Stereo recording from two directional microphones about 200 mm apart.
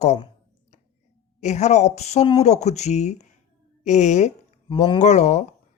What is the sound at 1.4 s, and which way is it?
A woman's voice, 35° left (ahead or behind).